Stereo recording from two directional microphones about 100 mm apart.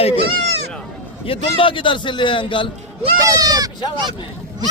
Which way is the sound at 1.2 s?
60° left (ahead or behind).